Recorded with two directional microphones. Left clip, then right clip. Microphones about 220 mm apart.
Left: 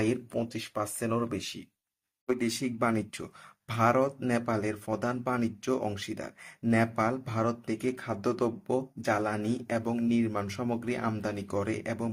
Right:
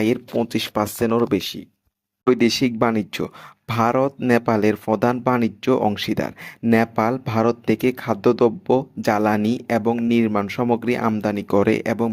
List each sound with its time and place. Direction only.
0.0 s speech: 35° right (ahead or behind)